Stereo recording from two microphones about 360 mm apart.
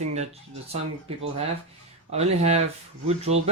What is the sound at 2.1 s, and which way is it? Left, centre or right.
Speech, centre.